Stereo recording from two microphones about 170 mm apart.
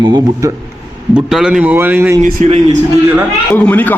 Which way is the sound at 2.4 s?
45° right (ahead or behind).